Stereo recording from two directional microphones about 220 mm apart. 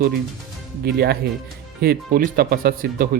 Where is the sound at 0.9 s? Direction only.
45° right (ahead or behind).